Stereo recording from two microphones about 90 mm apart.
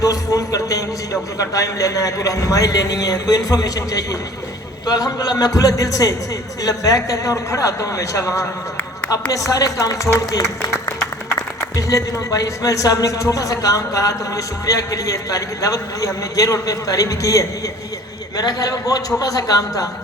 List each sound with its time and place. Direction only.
0.0 s a man's voice: 40° left (ahead or behind)